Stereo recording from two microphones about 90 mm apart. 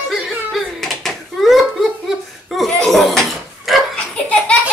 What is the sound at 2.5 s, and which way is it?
Laughter, 5° left (ahead or behind).